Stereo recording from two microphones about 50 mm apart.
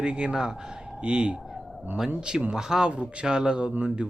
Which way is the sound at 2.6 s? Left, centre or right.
Centre.